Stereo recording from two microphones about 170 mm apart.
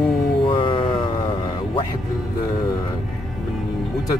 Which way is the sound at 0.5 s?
30° left (ahead or behind).